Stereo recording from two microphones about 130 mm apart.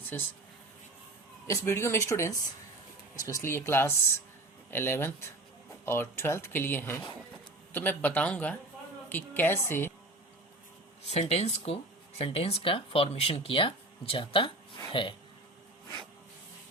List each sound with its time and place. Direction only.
0.0 s speech: 15° left (ahead or behind)
1.5 s speech: 20° left (ahead or behind)
11.1 s speech: 55° left (ahead or behind); by 15.1 s 40° left (ahead or behind)